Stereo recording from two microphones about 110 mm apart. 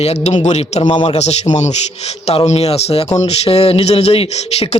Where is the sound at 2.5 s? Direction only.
70° left (ahead or behind).